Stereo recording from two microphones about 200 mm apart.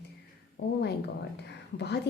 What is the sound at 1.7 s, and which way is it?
Speech, 55° left (ahead or behind).